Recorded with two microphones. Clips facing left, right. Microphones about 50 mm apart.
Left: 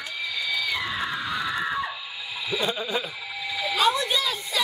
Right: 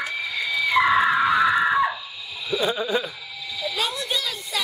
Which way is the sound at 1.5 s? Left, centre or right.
Right.